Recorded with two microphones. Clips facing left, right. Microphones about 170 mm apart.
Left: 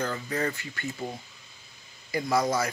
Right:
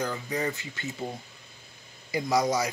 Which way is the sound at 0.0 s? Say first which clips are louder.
Even; 15° right (ahead or behind).